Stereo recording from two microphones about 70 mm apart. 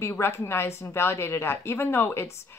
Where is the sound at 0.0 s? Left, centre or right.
Left.